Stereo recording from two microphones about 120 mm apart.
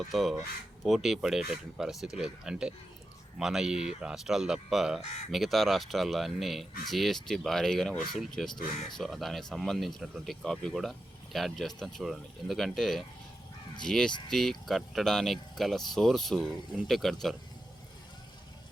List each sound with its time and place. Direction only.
0.1 s speech: centre (ahead or behind)